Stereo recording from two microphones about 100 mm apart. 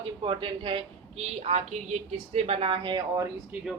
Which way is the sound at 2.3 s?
80° right.